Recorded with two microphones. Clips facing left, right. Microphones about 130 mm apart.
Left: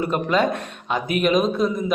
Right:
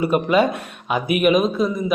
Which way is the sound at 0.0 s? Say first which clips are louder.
Right 3 dB; 10° right (ahead or behind).